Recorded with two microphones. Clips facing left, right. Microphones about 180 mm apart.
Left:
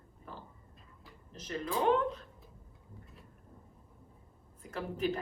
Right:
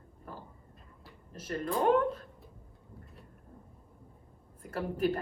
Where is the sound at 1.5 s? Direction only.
45° right (ahead or behind).